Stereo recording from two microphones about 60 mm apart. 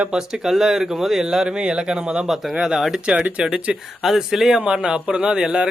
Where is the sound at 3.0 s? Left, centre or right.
Centre.